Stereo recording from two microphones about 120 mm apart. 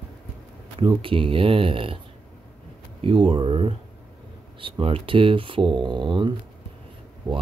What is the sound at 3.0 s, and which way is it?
Speech, 45° right (ahead or behind).